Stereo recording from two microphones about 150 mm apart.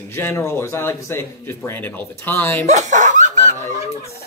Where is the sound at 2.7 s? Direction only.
55° right (ahead or behind).